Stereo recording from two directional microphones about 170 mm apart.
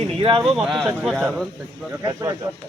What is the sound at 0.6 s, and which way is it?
Speech, centre (ahead or behind).